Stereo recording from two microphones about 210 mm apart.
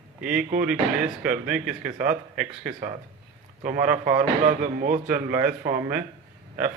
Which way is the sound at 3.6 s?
40° right (ahead or behind).